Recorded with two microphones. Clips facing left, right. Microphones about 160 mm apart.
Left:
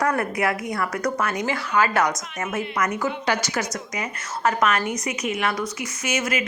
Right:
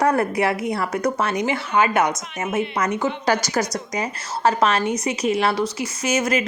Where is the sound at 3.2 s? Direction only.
40° right (ahead or behind).